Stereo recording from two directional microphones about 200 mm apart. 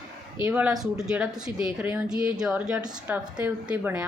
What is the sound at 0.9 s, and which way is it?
A woman's voice, 5° right (ahead or behind).